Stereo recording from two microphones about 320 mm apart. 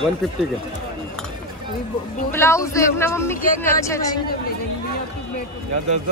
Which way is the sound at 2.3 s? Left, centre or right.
Centre.